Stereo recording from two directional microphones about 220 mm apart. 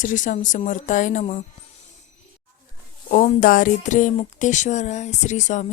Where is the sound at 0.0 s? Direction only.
35° left (ahead or behind).